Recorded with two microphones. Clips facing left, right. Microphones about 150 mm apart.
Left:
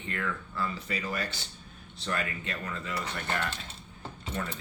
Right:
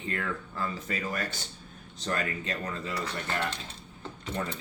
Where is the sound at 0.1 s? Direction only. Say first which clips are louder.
Even; 35° right (ahead or behind).